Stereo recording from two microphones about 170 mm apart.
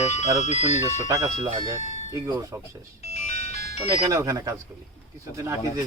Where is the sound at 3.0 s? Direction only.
40° left (ahead or behind).